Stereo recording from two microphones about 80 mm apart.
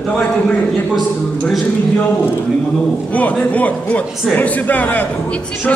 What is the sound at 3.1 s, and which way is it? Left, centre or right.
A man's voice, centre.